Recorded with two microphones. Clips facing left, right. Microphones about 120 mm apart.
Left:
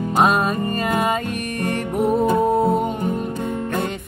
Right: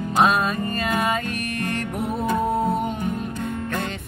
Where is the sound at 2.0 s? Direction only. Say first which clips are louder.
Left 10 dB; 40° left (ahead or behind).